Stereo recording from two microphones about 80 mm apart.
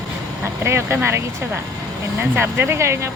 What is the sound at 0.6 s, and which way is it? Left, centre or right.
Speech, right.